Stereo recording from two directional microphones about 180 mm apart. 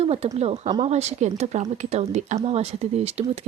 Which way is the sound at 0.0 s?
35° right (ahead or behind).